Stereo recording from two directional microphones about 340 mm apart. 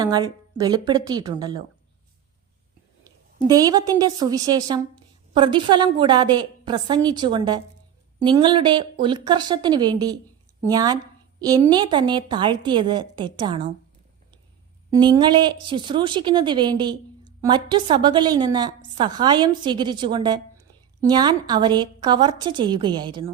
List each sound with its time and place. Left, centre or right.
0.0 s speech: centre
3.3 s speech: centre
14.8 s speech: centre